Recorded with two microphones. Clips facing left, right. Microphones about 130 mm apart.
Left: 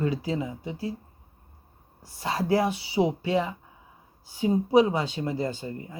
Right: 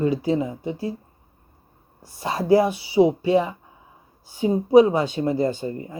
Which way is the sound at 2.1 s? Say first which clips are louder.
Right 6 dB; 15° right (ahead or behind).